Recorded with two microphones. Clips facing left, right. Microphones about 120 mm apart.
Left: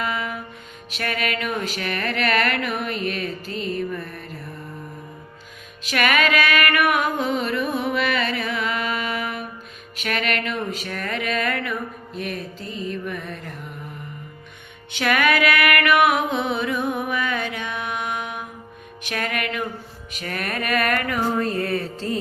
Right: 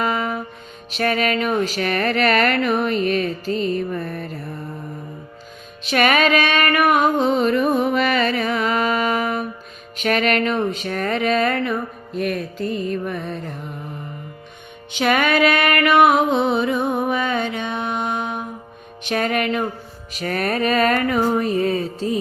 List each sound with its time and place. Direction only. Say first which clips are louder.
0.0 s music: right 5 dB; 40° right (ahead or behind)
5.8 s music: right 4 dB; 25° right (ahead or behind)
7.4 s music: right 6 dB; 40° right (ahead or behind)
12.1 s music: right 8 dB; 50° right (ahead or behind)
13.1 s music: right 4 dB; 30° right (ahead or behind)
14.9 s music: right 3 dB; 25° right (ahead or behind)